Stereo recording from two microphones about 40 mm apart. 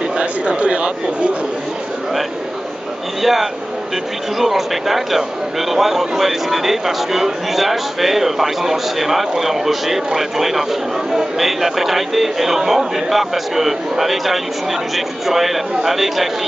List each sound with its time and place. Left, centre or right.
0.2 s speech: right
3.2 s speech: centre